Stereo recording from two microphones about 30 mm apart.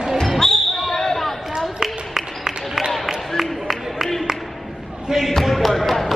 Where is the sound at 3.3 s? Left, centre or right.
Centre.